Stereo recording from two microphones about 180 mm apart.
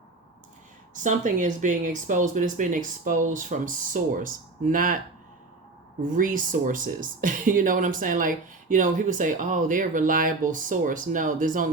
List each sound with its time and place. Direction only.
0.9 s speech: 45° right (ahead or behind)
6.0 s speech: 45° right (ahead or behind)